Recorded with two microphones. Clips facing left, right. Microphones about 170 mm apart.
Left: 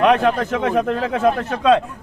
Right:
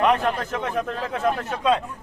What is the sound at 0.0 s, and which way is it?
A man's voice, 80° left.